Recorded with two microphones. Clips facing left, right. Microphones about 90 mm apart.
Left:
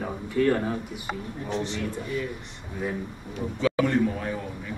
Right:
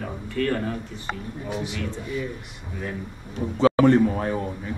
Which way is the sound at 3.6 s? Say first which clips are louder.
Right 6 dB; 40° right (ahead or behind).